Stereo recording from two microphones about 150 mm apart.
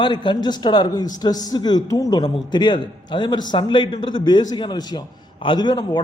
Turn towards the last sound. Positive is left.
turn(degrees=30)  # may be behind; listen again after turning